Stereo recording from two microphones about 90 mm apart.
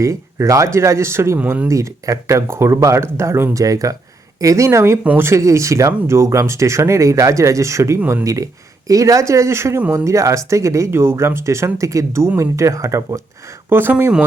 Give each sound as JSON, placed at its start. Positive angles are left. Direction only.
{"t": 0.0, "sound": "speech", "side_deg": -35}
{"t": 13.7, "sound": "speech", "side_deg": -25}